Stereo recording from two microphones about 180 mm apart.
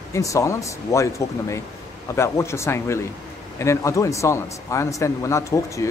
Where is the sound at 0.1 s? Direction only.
15° left (ahead or behind).